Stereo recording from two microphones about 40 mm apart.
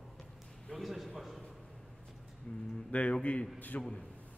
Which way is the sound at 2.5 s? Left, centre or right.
Left.